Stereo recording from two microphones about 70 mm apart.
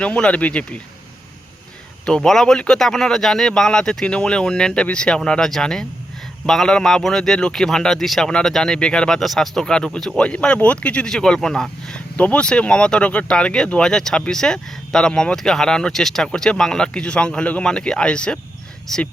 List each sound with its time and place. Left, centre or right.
0.0 s speech: centre
2.0 s speech: centre